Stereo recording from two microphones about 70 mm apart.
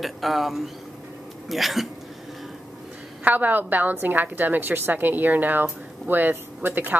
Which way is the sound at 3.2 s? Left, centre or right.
Right.